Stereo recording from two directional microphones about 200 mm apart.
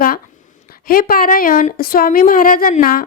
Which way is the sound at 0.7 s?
45° left (ahead or behind).